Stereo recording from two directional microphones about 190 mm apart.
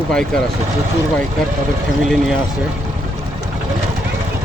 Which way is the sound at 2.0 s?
Centre (ahead or behind).